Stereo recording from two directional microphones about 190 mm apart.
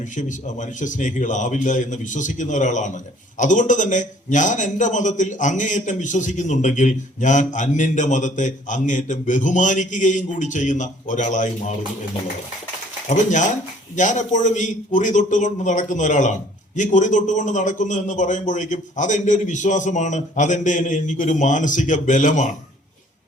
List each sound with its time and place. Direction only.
0.2 s a man's voice: 40° left (ahead or behind)
13.1 s a man's voice: 40° left (ahead or behind)